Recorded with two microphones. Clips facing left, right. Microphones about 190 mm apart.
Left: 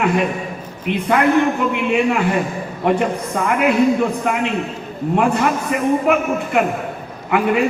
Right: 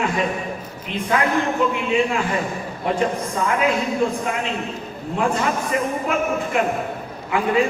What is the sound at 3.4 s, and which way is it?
Speech, 60° left (ahead or behind).